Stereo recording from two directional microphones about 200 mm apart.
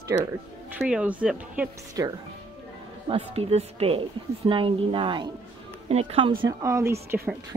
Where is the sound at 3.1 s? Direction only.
30° right (ahead or behind).